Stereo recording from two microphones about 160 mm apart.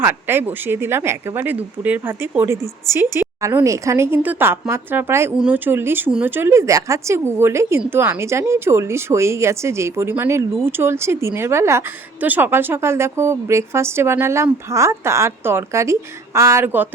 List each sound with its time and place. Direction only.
0.0 s speech: 15° right (ahead or behind)